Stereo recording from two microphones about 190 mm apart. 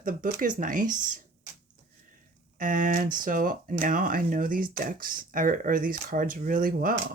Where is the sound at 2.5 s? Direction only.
45° right (ahead or behind).